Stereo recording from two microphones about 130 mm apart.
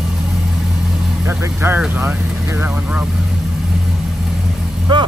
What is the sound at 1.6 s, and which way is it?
Speech, 15° right (ahead or behind).